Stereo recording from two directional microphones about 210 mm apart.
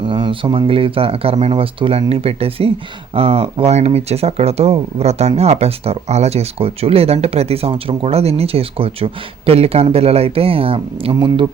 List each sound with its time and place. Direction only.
0.0 s speech: 25° right (ahead or behind)